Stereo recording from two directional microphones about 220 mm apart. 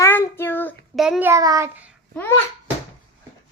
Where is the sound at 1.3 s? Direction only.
15° right (ahead or behind).